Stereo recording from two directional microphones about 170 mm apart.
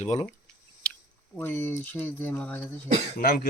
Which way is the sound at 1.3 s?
15° left (ahead or behind).